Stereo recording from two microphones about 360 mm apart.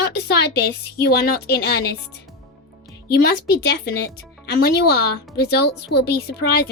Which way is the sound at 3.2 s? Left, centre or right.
Left.